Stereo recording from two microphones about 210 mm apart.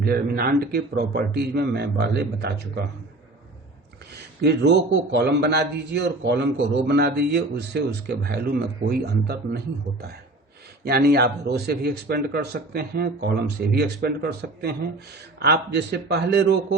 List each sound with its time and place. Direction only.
0.0 s a man's voice: 45° right (ahead or behind)
4.4 s a man's voice: 50° right (ahead or behind)
10.8 s a man's voice: 50° right (ahead or behind)